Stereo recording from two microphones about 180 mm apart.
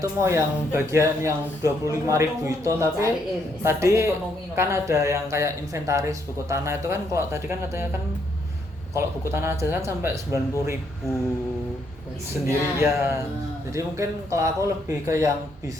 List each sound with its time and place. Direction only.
0.0 s speech: 15° right (ahead or behind)
9.0 s speech: 15° right (ahead or behind)
12.5 s speech: 15° right (ahead or behind)